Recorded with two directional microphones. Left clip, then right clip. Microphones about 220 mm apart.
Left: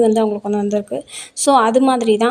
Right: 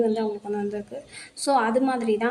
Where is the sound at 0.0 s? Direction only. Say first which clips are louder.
Left 10 dB; 35° left (ahead or behind).